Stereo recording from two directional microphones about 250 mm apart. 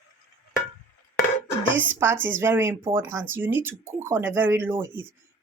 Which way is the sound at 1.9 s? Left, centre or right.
Centre.